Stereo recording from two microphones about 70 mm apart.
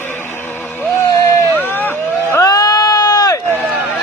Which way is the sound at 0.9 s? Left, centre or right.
Left.